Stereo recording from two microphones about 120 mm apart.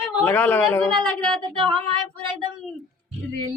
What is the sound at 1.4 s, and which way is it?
Female singing, 40° right (ahead or behind).